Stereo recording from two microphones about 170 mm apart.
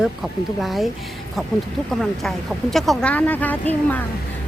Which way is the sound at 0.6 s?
Centre (ahead or behind).